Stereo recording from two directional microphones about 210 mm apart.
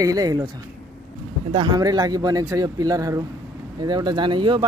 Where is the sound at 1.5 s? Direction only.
20° right (ahead or behind).